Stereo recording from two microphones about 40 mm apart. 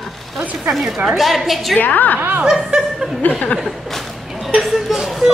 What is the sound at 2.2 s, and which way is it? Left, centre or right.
Snicker, right.